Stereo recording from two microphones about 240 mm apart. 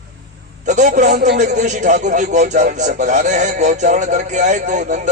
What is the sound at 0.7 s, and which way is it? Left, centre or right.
A man's voice, right.